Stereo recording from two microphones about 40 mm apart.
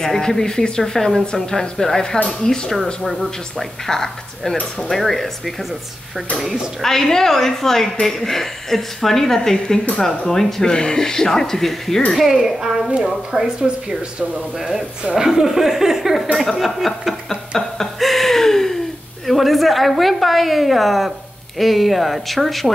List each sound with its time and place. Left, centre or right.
0.0 s a woman's voice: centre
2.7 s a woman's voice: centre
6.8 s a woman's voice: centre
12.5 s speech: centre
14.6 s speech: centre
16.5 s chuckle: centre
17.6 s a sound: centre
19.2 s a woman's voice: centre